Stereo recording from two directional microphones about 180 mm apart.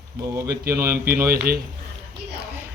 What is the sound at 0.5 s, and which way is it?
Speech, 60° right (ahead or behind).